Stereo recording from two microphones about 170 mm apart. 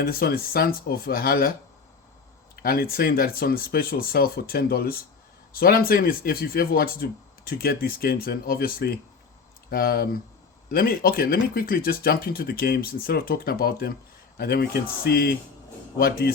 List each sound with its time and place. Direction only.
0.0 s speech: 60° left (ahead or behind)
2.6 s speech: 60° left (ahead or behind)